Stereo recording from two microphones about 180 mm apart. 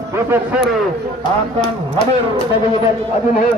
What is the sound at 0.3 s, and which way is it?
Speech, 5° right (ahead or behind).